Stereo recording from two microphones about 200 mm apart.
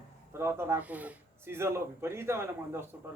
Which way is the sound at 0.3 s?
15° right (ahead or behind).